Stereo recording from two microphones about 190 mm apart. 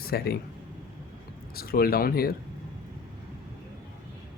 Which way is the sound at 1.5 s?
50° left (ahead or behind).